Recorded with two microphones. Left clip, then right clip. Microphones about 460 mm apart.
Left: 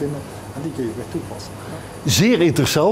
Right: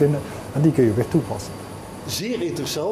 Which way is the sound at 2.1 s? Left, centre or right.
Left.